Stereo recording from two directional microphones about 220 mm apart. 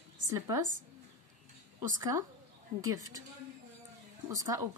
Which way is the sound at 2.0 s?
15° right (ahead or behind).